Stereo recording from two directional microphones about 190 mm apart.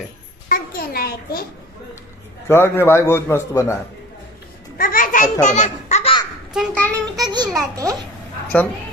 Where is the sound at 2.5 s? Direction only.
10° left (ahead or behind).